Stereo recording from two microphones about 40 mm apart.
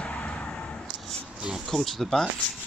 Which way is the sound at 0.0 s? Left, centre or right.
Left.